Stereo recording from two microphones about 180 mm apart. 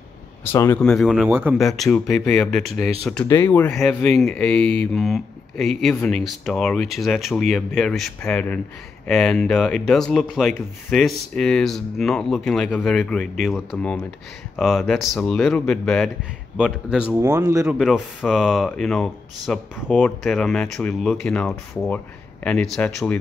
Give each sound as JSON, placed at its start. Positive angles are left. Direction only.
{"t": 0.4, "sound": "speech", "side_deg": 15}
{"t": 0.8, "sound": "a man's voice", "side_deg": 0}
{"t": 17.2, "sound": "a man's voice", "side_deg": -15}
{"t": 17.6, "sound": "speech", "side_deg": 0}